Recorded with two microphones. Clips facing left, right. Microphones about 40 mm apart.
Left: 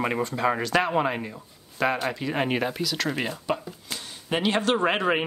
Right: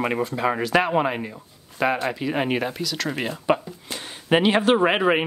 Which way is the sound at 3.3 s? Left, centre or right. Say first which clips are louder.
Right 7 dB; right.